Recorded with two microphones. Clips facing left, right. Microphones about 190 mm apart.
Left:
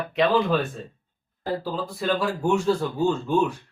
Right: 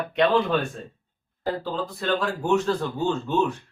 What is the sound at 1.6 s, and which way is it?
Speech, 10° left (ahead or behind).